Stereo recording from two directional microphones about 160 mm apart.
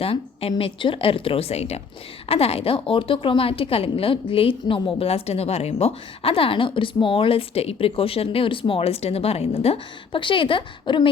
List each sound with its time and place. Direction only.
0.0 s a woman's voice: 35° left (ahead or behind)